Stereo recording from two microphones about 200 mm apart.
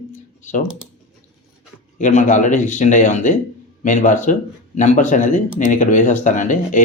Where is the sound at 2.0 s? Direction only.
40° left (ahead or behind).